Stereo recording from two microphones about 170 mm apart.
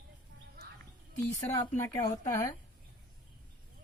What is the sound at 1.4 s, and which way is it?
Speech, 15° left (ahead or behind).